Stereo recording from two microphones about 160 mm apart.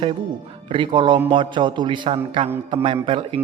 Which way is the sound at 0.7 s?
30° right (ahead or behind).